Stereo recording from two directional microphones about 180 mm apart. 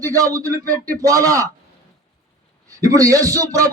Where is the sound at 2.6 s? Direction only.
20° right (ahead or behind).